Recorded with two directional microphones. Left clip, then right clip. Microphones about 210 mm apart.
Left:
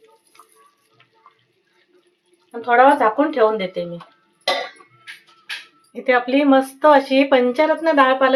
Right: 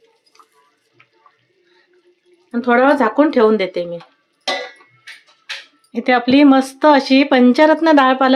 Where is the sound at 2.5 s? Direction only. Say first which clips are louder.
Even; 50° right (ahead or behind).